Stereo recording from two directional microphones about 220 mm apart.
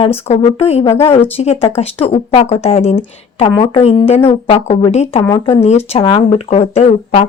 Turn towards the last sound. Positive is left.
turn(degrees=30)  # may be behind; listen again after turning